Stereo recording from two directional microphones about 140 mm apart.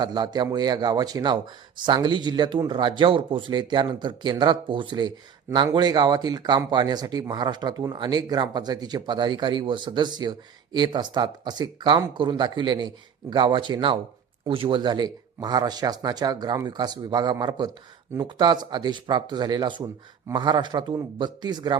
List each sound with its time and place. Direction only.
0.0 s speech: 30° right (ahead or behind)